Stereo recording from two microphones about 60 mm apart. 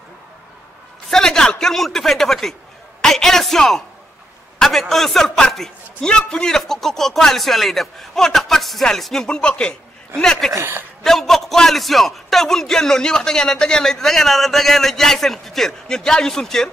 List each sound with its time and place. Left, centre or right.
1.1 s a man's voice: centre
10.6 s a woman's voice: right
11.1 s a man's voice: centre